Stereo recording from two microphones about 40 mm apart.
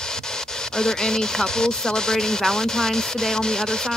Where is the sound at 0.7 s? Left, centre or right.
Centre.